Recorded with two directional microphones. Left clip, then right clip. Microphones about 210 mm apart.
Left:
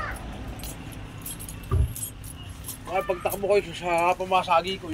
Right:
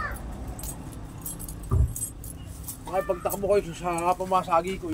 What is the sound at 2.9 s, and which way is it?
Speech, 55° right (ahead or behind).